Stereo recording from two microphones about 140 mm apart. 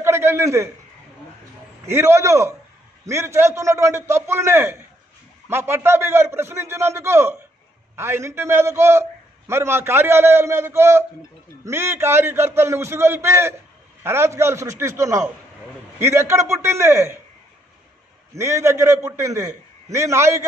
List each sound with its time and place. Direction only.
0.0 s a sound: 20° right (ahead or behind)
1.9 s a man's voice: 20° right (ahead or behind)
18.3 s a man's voice: 20° right (ahead or behind)